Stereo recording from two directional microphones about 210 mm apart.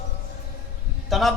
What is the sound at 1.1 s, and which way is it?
Speech, centre (ahead or behind).